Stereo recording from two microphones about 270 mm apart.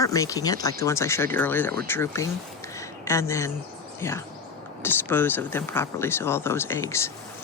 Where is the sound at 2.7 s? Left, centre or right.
Centre.